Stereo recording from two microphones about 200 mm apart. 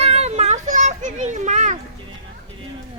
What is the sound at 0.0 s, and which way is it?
Children playing, 30° right (ahead or behind).